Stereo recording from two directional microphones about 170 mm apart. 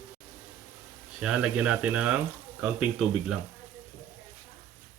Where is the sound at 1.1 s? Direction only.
5° right (ahead or behind).